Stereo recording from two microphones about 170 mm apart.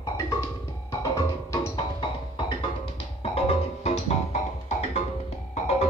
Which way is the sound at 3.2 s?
35° left (ahead or behind).